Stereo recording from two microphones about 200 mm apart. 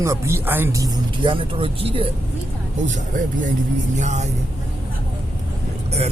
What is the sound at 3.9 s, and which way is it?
Speech, 35° right (ahead or behind).